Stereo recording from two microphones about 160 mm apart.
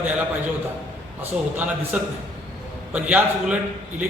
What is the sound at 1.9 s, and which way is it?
A man's voice, 10° right (ahead or behind).